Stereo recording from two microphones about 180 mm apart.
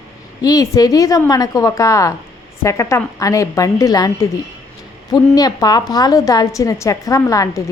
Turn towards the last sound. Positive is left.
turn(degrees=20)  # may be behind; listen again after turning